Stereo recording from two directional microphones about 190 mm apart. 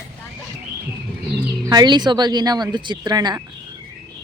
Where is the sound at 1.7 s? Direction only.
20° right (ahead or behind).